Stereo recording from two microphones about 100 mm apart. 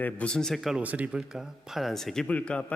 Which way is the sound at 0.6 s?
10° right (ahead or behind).